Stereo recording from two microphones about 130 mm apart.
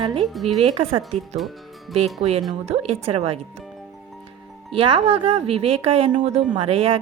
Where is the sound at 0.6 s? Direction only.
50° right (ahead or behind).